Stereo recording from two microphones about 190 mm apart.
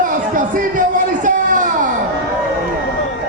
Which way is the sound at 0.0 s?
45° right (ahead or behind).